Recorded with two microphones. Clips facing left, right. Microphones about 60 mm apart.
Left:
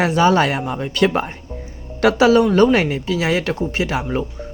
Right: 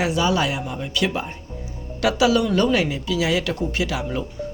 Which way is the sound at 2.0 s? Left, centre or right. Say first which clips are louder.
Left 5 dB; left.